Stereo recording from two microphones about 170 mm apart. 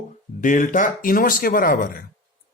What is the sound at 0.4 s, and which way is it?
Speech, 50° left (ahead or behind).